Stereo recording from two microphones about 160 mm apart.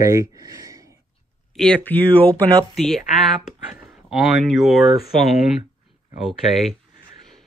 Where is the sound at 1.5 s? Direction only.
5° left (ahead or behind).